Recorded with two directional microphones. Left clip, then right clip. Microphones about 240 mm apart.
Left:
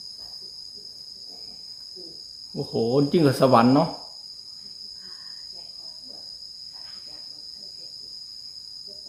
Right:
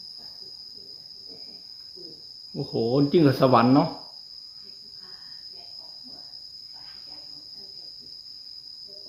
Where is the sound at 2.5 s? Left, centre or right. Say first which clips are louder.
Left 2 dB; centre.